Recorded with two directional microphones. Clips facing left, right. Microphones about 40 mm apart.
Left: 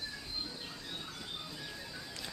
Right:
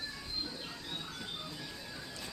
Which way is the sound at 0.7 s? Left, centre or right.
Centre.